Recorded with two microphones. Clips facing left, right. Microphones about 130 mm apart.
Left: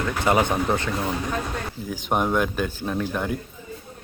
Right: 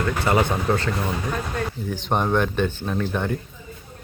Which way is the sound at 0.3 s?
15° left (ahead or behind).